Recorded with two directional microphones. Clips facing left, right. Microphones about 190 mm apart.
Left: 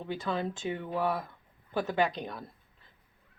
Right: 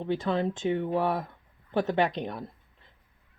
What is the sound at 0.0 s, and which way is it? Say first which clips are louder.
Speech: right 5 dB; 25° right (ahead or behind).